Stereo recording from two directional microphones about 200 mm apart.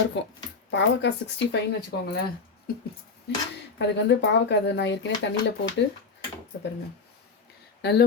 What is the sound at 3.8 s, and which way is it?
Speech, 60° left (ahead or behind).